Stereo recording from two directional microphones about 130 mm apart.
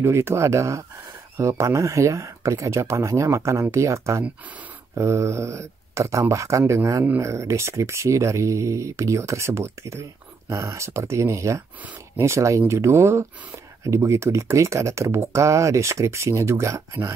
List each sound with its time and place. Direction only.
0.0 s speech: 20° right (ahead or behind)